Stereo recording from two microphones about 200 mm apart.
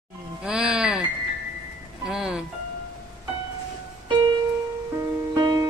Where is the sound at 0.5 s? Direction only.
5° right (ahead or behind).